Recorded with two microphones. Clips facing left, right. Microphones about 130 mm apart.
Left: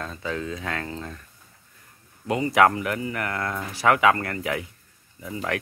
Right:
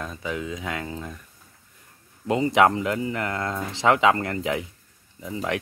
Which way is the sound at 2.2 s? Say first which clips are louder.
Right 1 dB; 25° right (ahead or behind).